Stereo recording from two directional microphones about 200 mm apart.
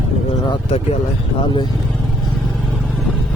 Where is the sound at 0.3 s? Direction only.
30° left (ahead or behind).